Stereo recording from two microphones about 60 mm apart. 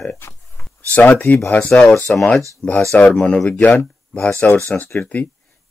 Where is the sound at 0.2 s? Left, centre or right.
Left.